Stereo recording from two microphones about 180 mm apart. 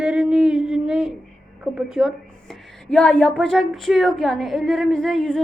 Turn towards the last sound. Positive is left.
turn(degrees=-5)  # may be behind; listen again after turning